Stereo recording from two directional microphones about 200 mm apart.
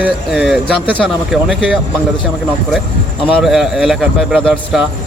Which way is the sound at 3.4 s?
Centre (ahead or behind).